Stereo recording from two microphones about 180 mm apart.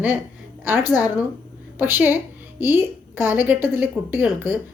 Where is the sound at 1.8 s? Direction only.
10° right (ahead or behind).